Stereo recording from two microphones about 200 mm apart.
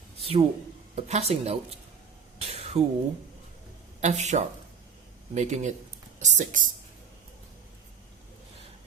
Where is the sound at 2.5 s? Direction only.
30° right (ahead or behind).